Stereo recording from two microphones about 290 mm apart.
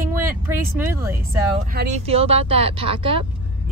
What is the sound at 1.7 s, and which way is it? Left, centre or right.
Speech, right.